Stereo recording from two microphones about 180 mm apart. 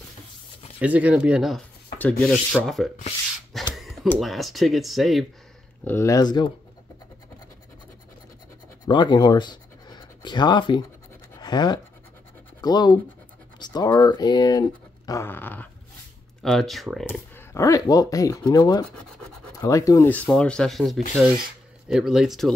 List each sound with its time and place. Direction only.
0.7 s speech: 10° right (ahead or behind)
5.9 s speech: 15° left (ahead or behind)
8.8 s speech: 25° left (ahead or behind)
11.4 s a sound: 25° left (ahead or behind)
12.6 s speech: 25° left (ahead or behind); by 17.0 s centre (ahead or behind)
17.1 s speech: 15° left (ahead or behind); by 22.5 s centre (ahead or behind)